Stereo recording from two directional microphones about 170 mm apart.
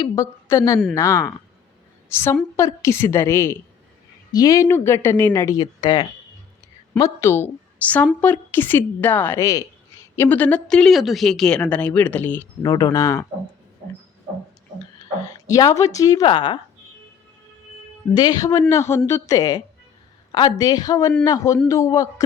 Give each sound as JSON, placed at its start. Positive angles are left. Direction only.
{"t": 0.0, "sound": "a woman's voice", "side_deg": 20}
{"t": 12.6, "sound": "speech", "side_deg": 25}
{"t": 15.4, "sound": "speech", "side_deg": 20}
{"t": 18.1, "sound": "a woman's voice", "side_deg": 25}